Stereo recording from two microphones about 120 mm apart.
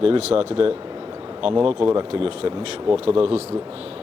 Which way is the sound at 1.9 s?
45° right (ahead or behind).